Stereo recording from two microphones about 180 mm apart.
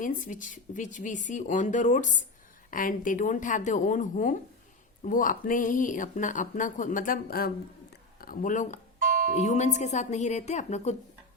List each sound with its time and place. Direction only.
0.0 s speech: 45° left (ahead or behind)
9.0 s music: 50° right (ahead or behind)
9.3 s speech: 40° left (ahead or behind)